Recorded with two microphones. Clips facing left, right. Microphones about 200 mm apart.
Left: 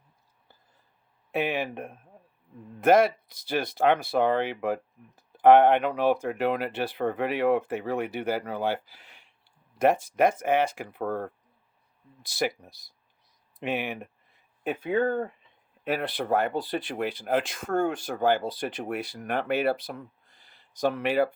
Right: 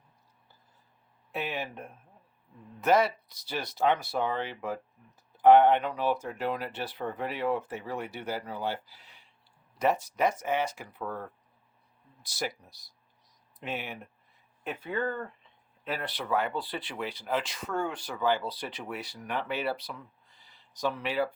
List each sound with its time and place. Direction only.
1.3 s speech: 55° left (ahead or behind)
13.6 s speech: 60° left (ahead or behind)